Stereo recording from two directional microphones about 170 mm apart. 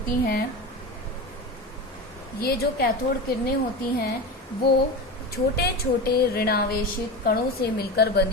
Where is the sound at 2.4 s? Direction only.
65° left (ahead or behind).